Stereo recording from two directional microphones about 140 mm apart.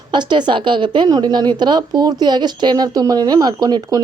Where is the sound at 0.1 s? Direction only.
35° right (ahead or behind).